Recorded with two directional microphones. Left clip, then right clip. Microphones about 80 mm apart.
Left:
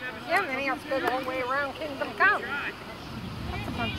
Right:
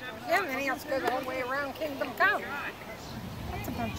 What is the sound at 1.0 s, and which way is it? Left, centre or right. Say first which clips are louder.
Speech: left 3 dB; centre.